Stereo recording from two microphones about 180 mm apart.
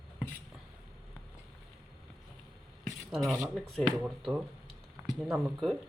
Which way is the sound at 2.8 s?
Centre (ahead or behind).